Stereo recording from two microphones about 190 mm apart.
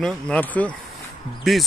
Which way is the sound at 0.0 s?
5° left (ahead or behind).